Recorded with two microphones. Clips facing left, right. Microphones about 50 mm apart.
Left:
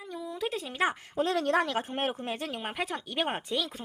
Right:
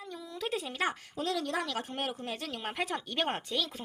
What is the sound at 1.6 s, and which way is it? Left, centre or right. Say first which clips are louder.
Speech: left 4 dB; left.